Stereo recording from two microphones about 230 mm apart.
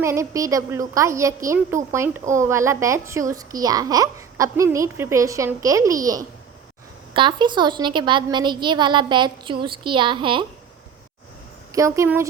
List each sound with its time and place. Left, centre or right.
0.0 s a woman's voice: centre
11.7 s speech: centre